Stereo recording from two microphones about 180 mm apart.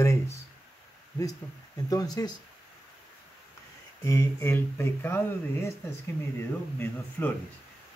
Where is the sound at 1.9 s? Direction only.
20° left (ahead or behind).